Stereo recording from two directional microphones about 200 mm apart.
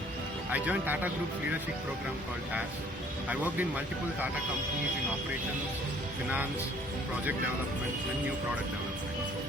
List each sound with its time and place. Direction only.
0.5 s speech: 5° right (ahead or behind)
3.2 s speech: 10° right (ahead or behind)